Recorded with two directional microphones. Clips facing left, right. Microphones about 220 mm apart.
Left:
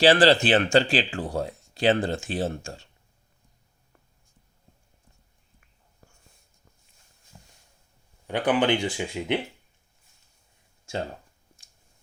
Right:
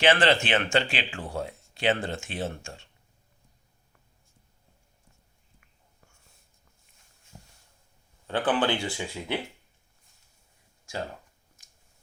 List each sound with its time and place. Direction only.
0.0 s speech: 35° left (ahead or behind)
7.3 s a sound: 20° right (ahead or behind)
8.3 s speech: 15° left (ahead or behind)